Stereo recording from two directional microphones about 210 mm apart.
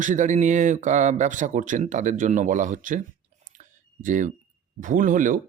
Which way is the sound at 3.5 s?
35° right (ahead or behind).